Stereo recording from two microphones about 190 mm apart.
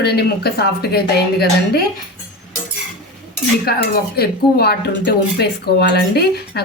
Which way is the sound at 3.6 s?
55° left (ahead or behind).